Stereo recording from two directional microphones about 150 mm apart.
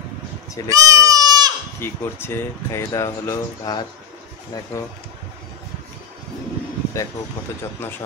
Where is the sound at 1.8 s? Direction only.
15° left (ahead or behind).